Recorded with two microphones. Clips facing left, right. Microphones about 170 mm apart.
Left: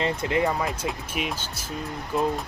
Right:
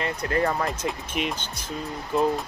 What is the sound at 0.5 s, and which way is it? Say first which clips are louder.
Speech: even; 5° left (ahead or behind).